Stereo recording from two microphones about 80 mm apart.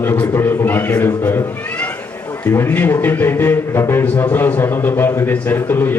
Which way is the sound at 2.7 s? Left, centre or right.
Left.